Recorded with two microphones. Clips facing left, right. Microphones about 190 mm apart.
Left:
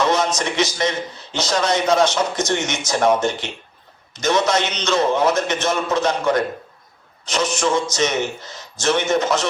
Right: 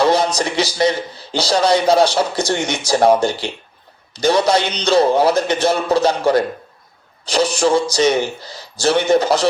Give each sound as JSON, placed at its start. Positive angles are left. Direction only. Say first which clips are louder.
{"t": 0.0, "sound": "a man's voice", "louder": "right 4 dB", "side_deg": -35}